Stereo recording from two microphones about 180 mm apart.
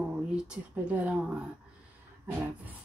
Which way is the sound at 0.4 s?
5° right (ahead or behind).